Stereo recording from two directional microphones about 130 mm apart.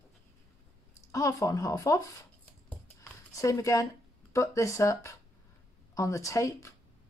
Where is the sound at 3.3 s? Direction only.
25° left (ahead or behind).